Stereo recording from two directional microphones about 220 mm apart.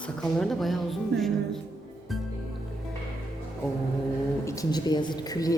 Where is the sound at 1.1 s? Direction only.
50° right (ahead or behind).